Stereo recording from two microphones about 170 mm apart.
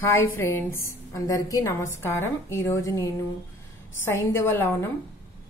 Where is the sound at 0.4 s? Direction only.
15° left (ahead or behind).